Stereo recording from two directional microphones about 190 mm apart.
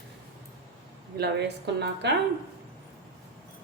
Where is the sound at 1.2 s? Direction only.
60° right (ahead or behind).